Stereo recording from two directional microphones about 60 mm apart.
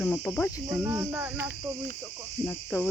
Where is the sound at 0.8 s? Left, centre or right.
Right.